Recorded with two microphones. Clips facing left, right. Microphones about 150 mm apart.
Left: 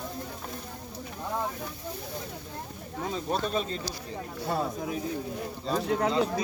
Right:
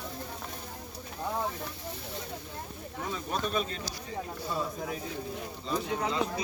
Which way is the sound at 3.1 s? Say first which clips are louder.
Left 3 dB; 30° left (ahead or behind).